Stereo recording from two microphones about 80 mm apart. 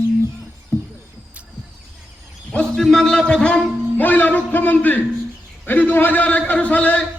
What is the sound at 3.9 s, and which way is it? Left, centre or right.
Music, left.